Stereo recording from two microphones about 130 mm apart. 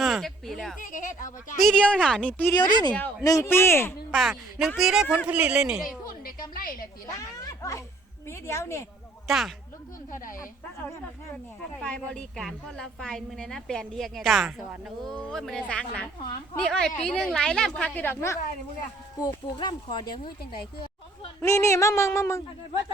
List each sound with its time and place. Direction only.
0.0 s speech: centre (ahead or behind)
0.8 s speech: 90° left
1.5 s a woman's voice: 5° left (ahead or behind)
2.6 s speech: 35° left (ahead or behind)
3.2 s speech: 20° left (ahead or behind)
4.1 s a woman's voice: centre (ahead or behind)
6.5 s a woman's voice: 90° left
7.4 s a sound: 25° left (ahead or behind)
8.3 s speech: 20° left (ahead or behind)
9.2 s speech: centre (ahead or behind)
11.8 s a woman's voice: 5° left (ahead or behind)
19.1 s speech: 30° left (ahead or behind)
21.4 s speech: 20° left (ahead or behind)